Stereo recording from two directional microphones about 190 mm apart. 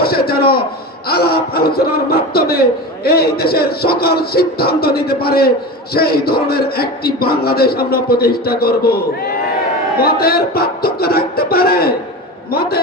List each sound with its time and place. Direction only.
0.0 s speech: 55° left (ahead or behind)
10.0 s speech: 55° left (ahead or behind)